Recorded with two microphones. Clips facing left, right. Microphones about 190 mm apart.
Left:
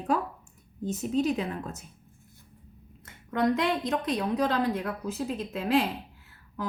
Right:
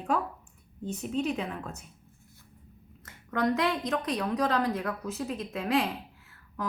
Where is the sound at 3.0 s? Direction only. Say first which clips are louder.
Left 2 dB; 25° left (ahead or behind).